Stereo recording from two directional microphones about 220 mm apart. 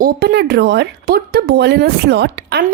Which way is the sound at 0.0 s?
45° right (ahead or behind).